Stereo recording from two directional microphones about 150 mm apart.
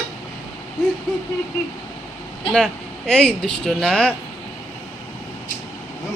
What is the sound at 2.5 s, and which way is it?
Speech, 5° left (ahead or behind).